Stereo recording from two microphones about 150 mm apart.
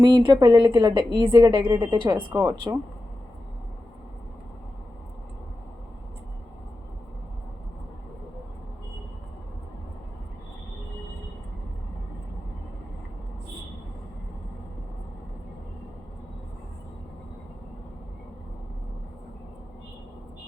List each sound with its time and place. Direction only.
0.0 s a woman's voice: 30° right (ahead or behind)
2.1 s speech: 20° right (ahead or behind)